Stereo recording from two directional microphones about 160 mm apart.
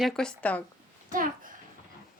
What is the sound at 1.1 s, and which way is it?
Speech, 60° right (ahead or behind).